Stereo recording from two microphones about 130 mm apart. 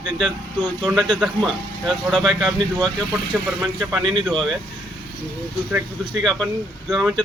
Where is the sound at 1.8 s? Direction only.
Centre (ahead or behind).